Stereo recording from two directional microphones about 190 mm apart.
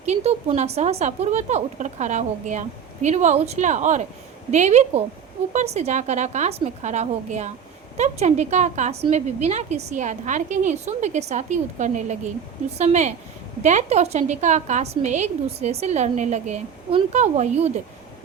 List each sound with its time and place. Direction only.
0.0 s a woman's voice: 35° right (ahead or behind)